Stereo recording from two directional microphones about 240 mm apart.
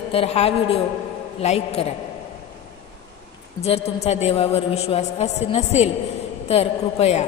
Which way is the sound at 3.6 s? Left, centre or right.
Left.